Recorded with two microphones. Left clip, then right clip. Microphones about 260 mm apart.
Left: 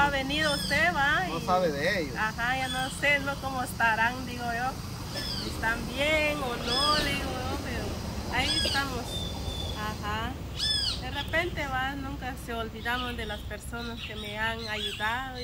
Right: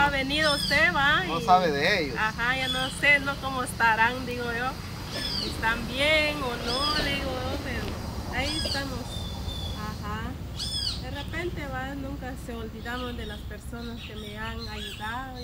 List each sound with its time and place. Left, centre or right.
0.0 s a sound: centre
1.3 s speech: centre
2.1 s speech: centre
8.3 s speech: centre
11.3 s speech: centre